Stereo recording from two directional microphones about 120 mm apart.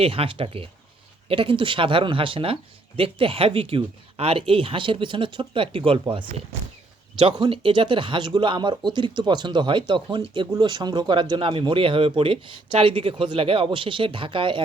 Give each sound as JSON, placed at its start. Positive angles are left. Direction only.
{"t": 0.0, "sound": "speech", "side_deg": -50}